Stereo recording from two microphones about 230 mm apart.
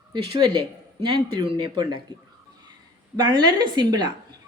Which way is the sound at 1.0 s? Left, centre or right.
Right.